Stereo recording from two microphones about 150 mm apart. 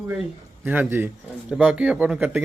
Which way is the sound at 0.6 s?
10° right (ahead or behind).